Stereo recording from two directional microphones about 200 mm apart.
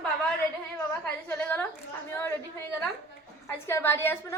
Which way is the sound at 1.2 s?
10° left (ahead or behind).